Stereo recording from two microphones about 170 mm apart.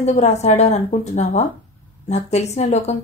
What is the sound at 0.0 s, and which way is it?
Speech, 40° left (ahead or behind).